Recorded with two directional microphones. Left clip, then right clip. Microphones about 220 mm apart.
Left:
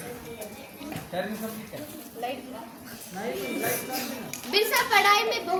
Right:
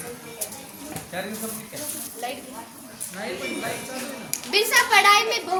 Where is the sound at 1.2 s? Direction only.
20° right (ahead or behind).